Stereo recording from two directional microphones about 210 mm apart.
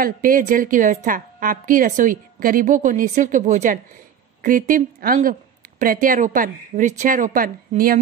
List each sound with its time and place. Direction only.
0.0 s a woman's voice: 40° right (ahead or behind)